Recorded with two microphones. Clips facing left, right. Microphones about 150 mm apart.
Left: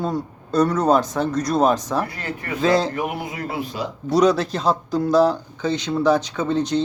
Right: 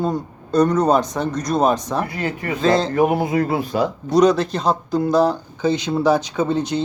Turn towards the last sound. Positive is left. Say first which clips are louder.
# right 1 dB
turn(degrees=-5)  # may be behind; listen again after turning